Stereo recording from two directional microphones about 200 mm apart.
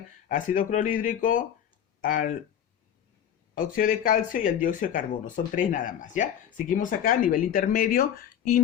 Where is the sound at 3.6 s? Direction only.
45° left (ahead or behind).